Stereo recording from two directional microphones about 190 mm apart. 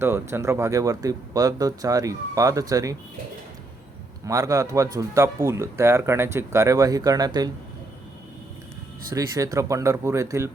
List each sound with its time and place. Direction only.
0.0 s speech: 15° right (ahead or behind)
4.3 s speech: 15° right (ahead or behind)
9.1 s speech: 15° right (ahead or behind)